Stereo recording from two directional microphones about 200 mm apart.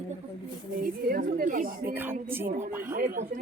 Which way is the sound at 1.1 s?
45° right (ahead or behind).